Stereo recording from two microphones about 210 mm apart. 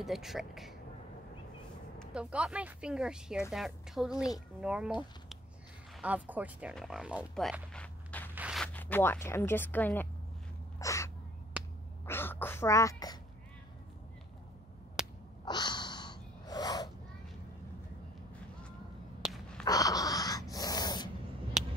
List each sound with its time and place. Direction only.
0.0 s speech: centre (ahead or behind)
2.0 s speech: 5° right (ahead or behind)
5.9 s speech: 5° right (ahead or behind)
8.4 s a sound: 5° right (ahead or behind)
8.7 s speech: 10° left (ahead or behind)
10.8 s crow: 15° left (ahead or behind)
12.1 s a sound: 10° left (ahead or behind)
15.0 s a sound: 5° right (ahead or behind)
15.4 s snort: 20° left (ahead or behind)
19.6 s gasp: 15° left (ahead or behind)